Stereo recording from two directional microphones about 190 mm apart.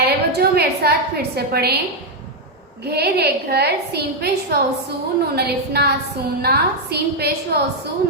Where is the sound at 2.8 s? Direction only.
60° right (ahead or behind).